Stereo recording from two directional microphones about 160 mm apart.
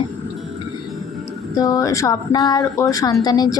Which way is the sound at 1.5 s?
20° left (ahead or behind).